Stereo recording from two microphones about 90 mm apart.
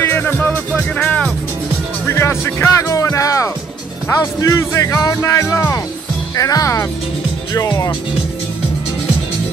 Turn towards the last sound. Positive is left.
turn(degrees=40)  # may be behind; listen again after turning